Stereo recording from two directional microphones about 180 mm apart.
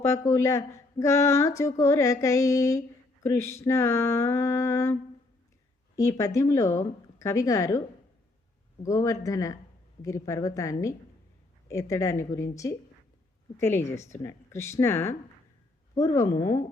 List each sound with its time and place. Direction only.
0.0 s speech: 15° left (ahead or behind)
6.0 s speech: 15° left (ahead or behind)
8.8 s speech: 20° left (ahead or behind)